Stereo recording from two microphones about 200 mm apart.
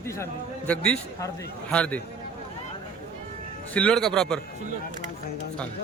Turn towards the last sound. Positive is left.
turn(degrees=5)  # may be behind; listen again after turning